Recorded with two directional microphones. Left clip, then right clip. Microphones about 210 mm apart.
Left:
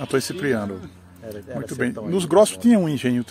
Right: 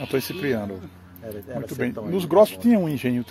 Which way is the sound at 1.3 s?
10° left (ahead or behind).